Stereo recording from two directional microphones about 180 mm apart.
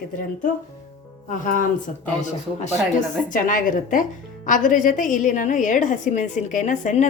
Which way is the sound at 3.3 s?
50° left (ahead or behind).